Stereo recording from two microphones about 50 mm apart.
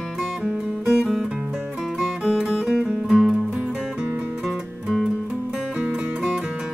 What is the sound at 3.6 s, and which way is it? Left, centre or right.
Music, right.